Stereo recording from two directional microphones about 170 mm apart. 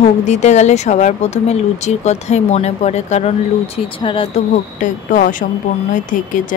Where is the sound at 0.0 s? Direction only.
40° left (ahead or behind).